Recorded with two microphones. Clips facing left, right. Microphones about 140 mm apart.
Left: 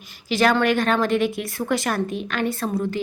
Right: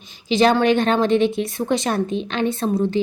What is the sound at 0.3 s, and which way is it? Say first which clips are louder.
A woman's voice: right 3 dB; 20° right (ahead or behind).